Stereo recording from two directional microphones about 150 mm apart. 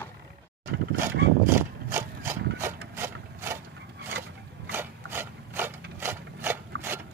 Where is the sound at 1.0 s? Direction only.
15° right (ahead or behind).